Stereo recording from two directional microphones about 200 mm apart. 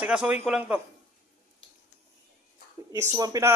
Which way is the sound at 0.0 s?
5° right (ahead or behind).